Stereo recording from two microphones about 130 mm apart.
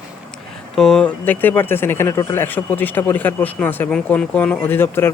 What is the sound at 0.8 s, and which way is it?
Speech, 5° left (ahead or behind).